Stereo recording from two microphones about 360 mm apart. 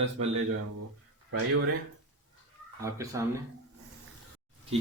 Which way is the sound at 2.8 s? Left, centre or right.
Centre.